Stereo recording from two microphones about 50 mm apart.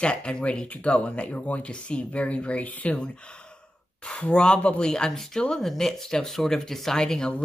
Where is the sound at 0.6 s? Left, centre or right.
Left.